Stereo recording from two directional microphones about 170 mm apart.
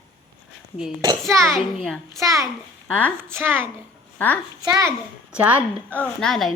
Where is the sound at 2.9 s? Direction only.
5° left (ahead or behind).